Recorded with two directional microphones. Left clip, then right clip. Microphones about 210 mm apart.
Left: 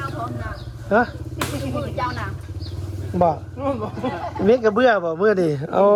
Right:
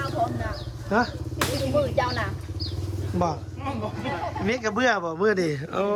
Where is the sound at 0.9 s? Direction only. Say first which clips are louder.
Left 6 dB; 15° right (ahead or behind).